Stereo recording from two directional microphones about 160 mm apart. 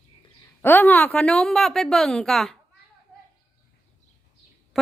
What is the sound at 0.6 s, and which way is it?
A woman's voice, 10° left (ahead or behind).